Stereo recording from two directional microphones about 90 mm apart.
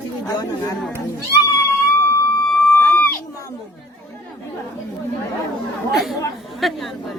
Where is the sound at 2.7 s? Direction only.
20° left (ahead or behind).